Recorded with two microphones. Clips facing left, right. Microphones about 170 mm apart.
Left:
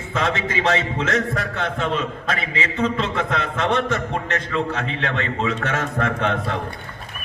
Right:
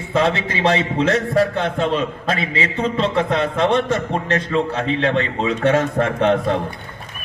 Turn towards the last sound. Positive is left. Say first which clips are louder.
# right 5 dB
turn(degrees=-30)  # may be behind; listen again after turning